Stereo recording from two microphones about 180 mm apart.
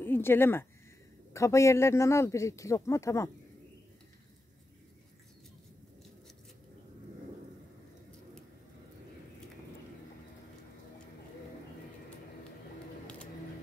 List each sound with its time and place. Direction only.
0.0 s speech: 10° left (ahead or behind)